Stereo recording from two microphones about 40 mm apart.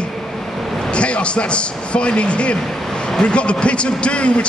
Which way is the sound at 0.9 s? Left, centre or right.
Left.